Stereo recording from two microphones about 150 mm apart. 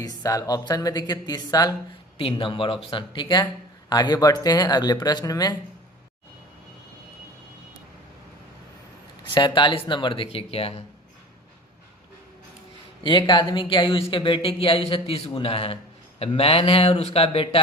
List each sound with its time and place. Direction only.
0.0 s speech: 25° left (ahead or behind)
2.1 s a man's voice: 35° left (ahead or behind)
9.3 s a man's voice: 30° left (ahead or behind)
13.0 s a man's voice: 30° left (ahead or behind)